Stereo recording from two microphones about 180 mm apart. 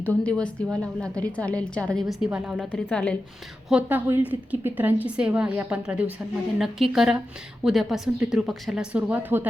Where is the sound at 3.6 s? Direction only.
5° right (ahead or behind).